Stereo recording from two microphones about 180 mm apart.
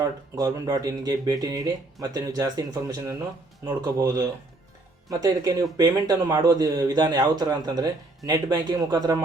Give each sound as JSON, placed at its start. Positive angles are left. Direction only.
{"t": 0.0, "sound": "speech", "side_deg": -20}